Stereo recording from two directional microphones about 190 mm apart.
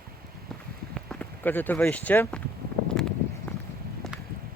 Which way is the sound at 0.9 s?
5° left (ahead or behind).